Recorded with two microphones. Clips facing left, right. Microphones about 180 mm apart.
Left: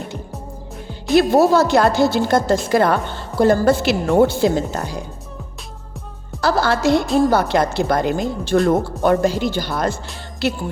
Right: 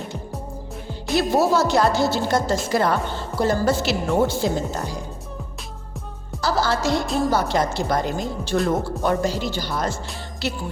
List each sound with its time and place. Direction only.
1.1 s a woman's voice: 60° left (ahead or behind)
6.4 s a woman's voice: 60° left (ahead or behind)